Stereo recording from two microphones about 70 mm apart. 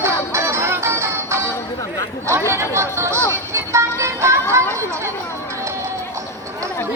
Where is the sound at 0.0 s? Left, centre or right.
Right.